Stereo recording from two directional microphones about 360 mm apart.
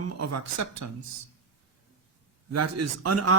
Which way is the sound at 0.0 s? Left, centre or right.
Right.